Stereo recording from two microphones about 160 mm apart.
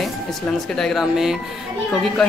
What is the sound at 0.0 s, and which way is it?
Speech, centre (ahead or behind).